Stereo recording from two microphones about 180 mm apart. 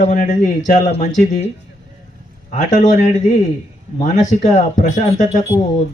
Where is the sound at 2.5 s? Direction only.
45° left (ahead or behind).